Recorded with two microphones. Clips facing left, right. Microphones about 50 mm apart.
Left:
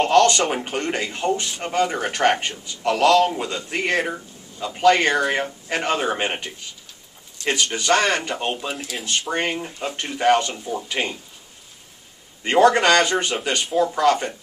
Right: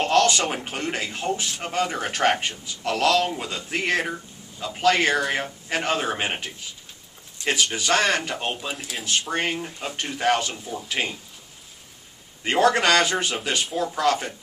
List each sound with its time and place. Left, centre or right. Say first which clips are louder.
0.0 s a sound: left 4 dB; centre
0.7 s speech: left 3 dB; centre
12.4 s speech: left 4 dB; centre